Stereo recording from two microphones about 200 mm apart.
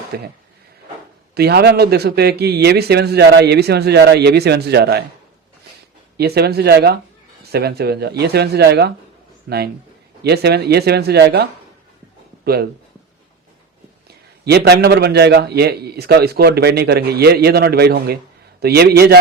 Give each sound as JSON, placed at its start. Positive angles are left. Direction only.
{"t": 0.1, "sound": "a man's voice", "side_deg": -50}
{"t": 1.4, "sound": "a man's voice", "side_deg": -55}
{"t": 6.1, "sound": "a man's voice", "side_deg": -55}
{"t": 14.4, "sound": "a man's voice", "side_deg": -55}